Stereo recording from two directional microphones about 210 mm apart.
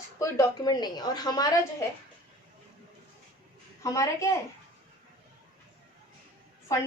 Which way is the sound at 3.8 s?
15° left (ahead or behind).